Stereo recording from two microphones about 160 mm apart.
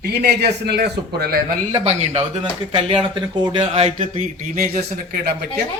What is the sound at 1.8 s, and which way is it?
Speech, 40° right (ahead or behind).